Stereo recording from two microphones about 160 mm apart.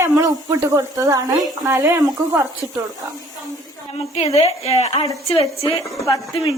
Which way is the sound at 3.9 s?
40° left (ahead or behind).